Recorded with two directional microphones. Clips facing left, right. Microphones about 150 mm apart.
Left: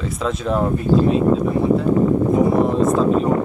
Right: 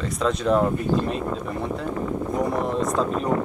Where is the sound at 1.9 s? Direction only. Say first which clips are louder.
Left 10 dB; 40° left (ahead or behind).